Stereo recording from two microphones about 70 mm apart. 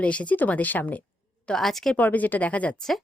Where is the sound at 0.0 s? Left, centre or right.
Centre.